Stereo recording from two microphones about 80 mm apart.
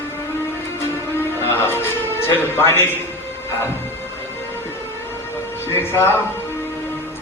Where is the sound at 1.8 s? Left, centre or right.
Left.